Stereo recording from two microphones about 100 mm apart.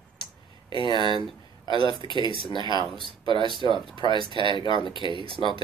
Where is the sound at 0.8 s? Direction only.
50° left (ahead or behind).